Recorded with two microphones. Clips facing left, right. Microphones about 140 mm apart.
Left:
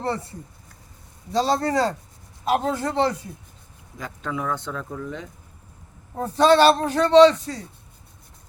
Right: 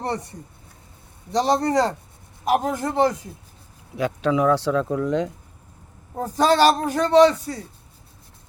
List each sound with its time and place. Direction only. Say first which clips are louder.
0.0 s a man's voice: even; 20° right (ahead or behind)
3.9 s speech: right 9 dB; 75° right (ahead or behind)
6.1 s a man's voice: left 2 dB; 10° right (ahead or behind)